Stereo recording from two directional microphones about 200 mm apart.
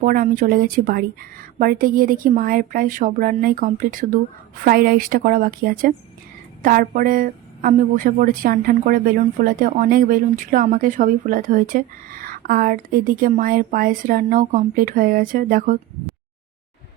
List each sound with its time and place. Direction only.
0.0 s a woman's voice: 45° right (ahead or behind)